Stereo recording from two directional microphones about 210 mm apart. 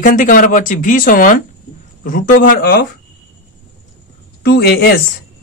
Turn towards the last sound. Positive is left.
turn(degrees=50)  # may be behind; listen again after turning